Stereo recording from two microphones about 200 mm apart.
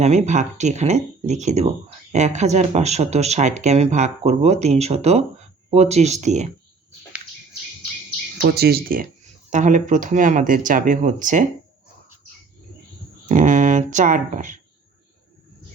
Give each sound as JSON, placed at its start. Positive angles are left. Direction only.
{"t": 0.0, "sound": "speech", "side_deg": -35}
{"t": 8.4, "sound": "speech", "side_deg": -50}
{"t": 13.2, "sound": "a sound", "side_deg": -40}